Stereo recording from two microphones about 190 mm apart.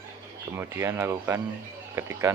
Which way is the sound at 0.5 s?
10° right (ahead or behind).